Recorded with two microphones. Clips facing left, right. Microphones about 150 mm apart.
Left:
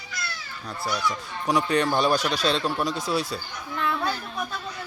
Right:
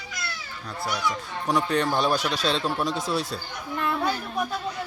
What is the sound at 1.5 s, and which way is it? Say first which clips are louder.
A man's voice: left 1 dB; centre (ahead or behind).